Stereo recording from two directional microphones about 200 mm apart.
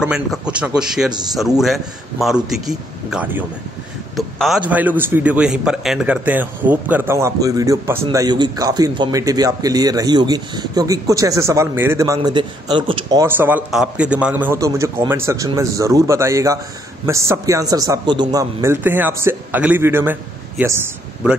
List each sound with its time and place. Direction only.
0.0 s a man's voice: 5° right (ahead or behind); by 13.2 s 25° right (ahead or behind)
13.2 s a man's voice: 10° right (ahead or behind)